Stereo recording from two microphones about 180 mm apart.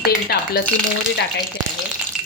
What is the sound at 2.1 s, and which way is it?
Frying, 5° right (ahead or behind).